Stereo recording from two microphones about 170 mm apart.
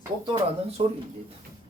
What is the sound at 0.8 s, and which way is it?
Speech, 35° right (ahead or behind).